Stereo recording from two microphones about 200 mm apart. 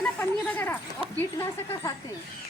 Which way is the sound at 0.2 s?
10° left (ahead or behind).